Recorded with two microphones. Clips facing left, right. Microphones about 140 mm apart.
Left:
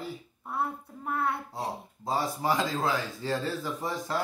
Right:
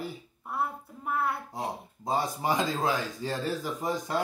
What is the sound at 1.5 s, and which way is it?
Speech, 20° right (ahead or behind).